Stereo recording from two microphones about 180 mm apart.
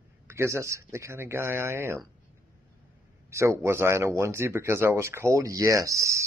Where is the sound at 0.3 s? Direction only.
15° right (ahead or behind).